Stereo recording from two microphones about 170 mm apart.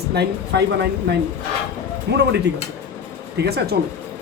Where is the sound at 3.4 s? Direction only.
75° right (ahead or behind).